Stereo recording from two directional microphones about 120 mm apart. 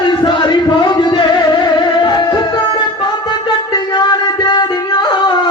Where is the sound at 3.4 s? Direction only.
35° left (ahead or behind).